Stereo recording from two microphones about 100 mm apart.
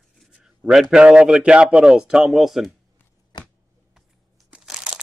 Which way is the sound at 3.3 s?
45° left (ahead or behind).